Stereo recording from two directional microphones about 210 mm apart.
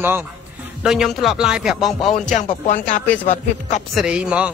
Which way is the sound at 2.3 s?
30° left (ahead or behind).